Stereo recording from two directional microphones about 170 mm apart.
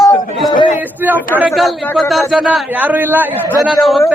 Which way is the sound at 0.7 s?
10° right (ahead or behind).